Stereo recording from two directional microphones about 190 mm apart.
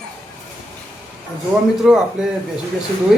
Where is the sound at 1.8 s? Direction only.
Centre (ahead or behind).